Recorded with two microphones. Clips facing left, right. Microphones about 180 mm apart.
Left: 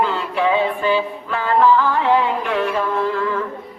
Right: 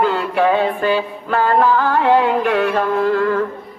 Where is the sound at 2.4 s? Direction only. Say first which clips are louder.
Right 4 dB; 65° right (ahead or behind).